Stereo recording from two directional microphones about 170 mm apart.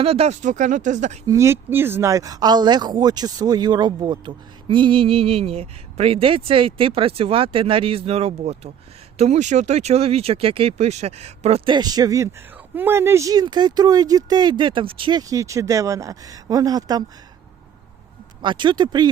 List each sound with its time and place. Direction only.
0.0 s speech: 35° right (ahead or behind)
1.3 s speech: 15° right (ahead or behind)
18.4 s speech: 30° right (ahead or behind)